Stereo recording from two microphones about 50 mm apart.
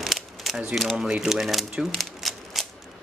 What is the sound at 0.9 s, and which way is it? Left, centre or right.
Speech, centre.